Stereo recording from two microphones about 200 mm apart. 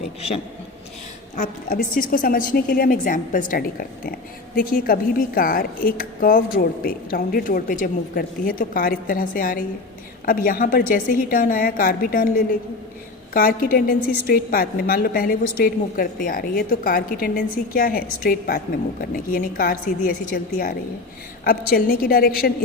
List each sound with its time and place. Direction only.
1.4 s a woman's voice: 45° left (ahead or behind)